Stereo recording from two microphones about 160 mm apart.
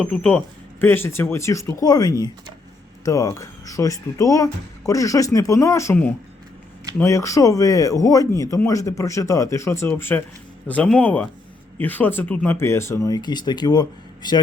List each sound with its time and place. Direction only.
0.0 s speech: 5° left (ahead or behind); by 14.4 s 25° left (ahead or behind)